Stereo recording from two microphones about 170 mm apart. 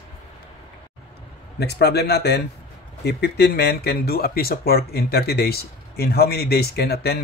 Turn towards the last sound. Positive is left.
turn(degrees=70)  # may be behind; listen again after turning